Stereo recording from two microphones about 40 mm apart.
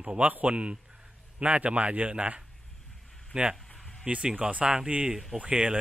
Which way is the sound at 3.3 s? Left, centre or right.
Right.